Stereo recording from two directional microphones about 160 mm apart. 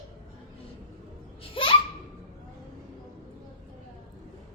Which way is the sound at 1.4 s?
35° left (ahead or behind).